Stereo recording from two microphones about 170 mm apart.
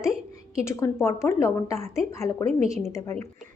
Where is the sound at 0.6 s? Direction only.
15° left (ahead or behind).